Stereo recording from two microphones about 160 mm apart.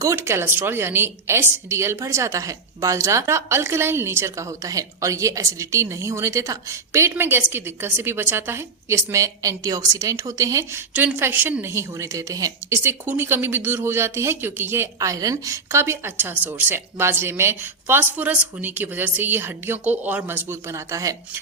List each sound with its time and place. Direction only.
0.0 s a woman's voice: 15° right (ahead or behind)